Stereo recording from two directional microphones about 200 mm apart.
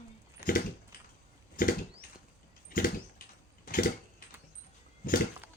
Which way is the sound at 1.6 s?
45° left (ahead or behind).